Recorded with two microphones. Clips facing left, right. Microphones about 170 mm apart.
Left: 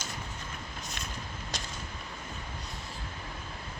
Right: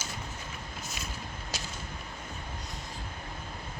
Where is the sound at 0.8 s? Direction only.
5° right (ahead or behind).